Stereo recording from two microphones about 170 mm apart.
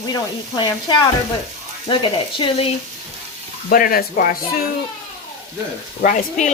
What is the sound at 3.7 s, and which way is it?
Speech, 60° left (ahead or behind).